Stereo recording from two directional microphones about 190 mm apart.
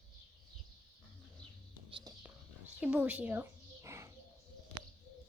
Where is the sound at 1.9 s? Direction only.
25° right (ahead or behind).